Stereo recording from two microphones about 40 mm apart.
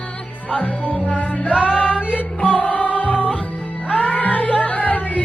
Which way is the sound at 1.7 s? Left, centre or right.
Left.